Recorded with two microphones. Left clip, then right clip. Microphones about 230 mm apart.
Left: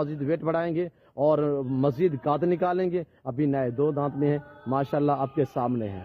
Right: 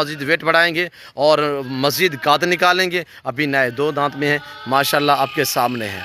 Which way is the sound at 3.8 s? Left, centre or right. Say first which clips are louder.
Right 7 dB; right.